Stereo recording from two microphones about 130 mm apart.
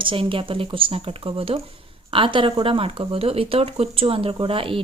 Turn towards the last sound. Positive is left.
turn(degrees=-45)  # may be behind; listen again after turning